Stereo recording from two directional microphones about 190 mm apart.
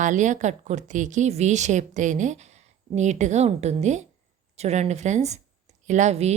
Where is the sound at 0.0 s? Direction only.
40° right (ahead or behind).